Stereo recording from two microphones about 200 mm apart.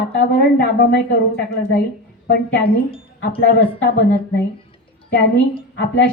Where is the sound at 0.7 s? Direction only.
55° left (ahead or behind).